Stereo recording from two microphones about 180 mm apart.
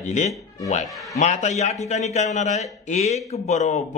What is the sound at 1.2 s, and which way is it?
Speech, 40° left (ahead or behind).